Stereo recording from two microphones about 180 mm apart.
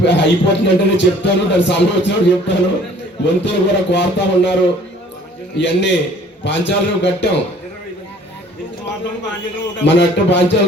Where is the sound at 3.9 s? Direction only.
75° left (ahead or behind).